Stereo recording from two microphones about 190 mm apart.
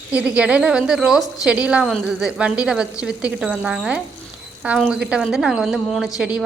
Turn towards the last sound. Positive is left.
turn(degrees=-5)  # may be behind; listen again after turning